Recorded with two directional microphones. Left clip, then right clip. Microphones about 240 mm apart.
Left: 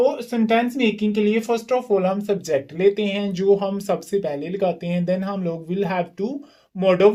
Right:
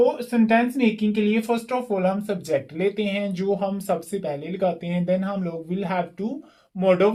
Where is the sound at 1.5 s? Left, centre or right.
Left.